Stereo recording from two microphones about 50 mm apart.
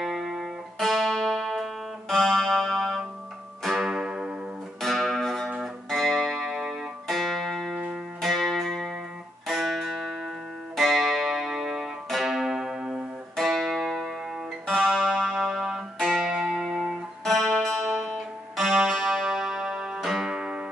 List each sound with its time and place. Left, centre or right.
0.0 s music: centre
3.8 s music: centre
4.8 s music: centre
13.4 s music: centre
17.2 s music: centre
18.6 s music: centre
20.0 s music: centre
20.2 s music: centre